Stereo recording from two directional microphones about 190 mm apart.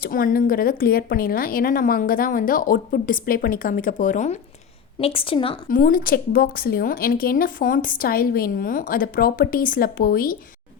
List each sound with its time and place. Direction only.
0.0 s a woman's voice: 50° left (ahead or behind)
4.9 s a woman's voice: 30° left (ahead or behind)
5.6 s a woman's voice: 45° left (ahead or behind)